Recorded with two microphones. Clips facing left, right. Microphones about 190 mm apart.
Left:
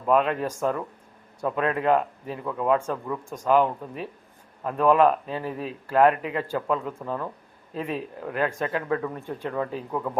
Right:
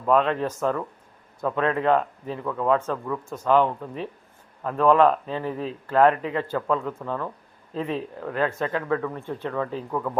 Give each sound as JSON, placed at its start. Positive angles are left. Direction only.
{"t": 0.0, "sound": "speech", "side_deg": 10}
{"t": 8.9, "sound": "speech", "side_deg": 25}